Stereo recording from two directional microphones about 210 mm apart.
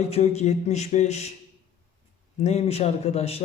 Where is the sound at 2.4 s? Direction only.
30° left (ahead or behind).